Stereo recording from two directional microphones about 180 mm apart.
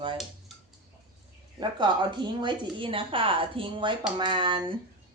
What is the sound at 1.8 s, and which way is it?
Speech, 25° right (ahead or behind).